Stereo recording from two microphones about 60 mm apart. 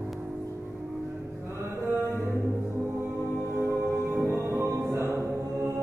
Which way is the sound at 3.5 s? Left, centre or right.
Right.